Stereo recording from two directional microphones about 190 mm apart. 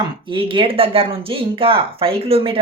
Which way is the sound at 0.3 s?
25° right (ahead or behind).